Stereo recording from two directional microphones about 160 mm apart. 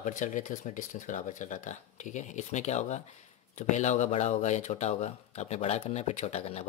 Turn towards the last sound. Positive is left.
turn(degrees=40)  # may be behind; listen again after turning